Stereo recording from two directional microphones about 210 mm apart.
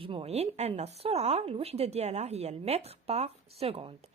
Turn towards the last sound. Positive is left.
turn(degrees=-25)  # may be behind; listen again after turning